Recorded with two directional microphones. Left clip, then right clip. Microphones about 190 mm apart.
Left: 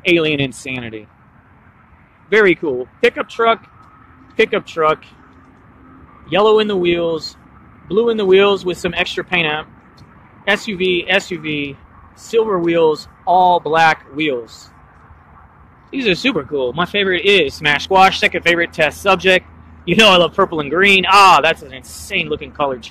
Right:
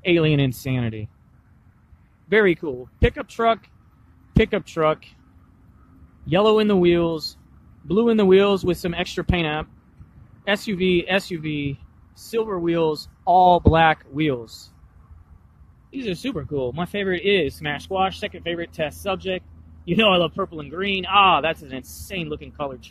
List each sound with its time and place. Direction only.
0.0 s speech: 20° right (ahead or behind)
2.2 s speech: 20° right (ahead or behind)
6.2 s speech: 20° right (ahead or behind)
15.9 s speech: 5° right (ahead or behind)
20.4 s speech: centre (ahead or behind)